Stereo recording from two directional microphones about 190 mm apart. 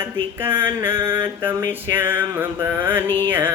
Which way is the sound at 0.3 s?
10° right (ahead or behind).